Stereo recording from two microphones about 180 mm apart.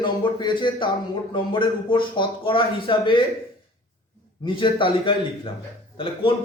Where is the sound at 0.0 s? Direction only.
25° left (ahead or behind).